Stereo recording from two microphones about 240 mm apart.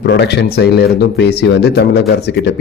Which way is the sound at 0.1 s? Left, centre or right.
Left.